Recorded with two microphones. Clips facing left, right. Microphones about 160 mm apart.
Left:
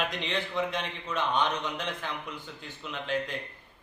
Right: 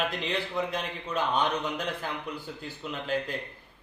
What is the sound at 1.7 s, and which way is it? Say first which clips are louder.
A man's voice: right 2 dB; 40° right (ahead or behind).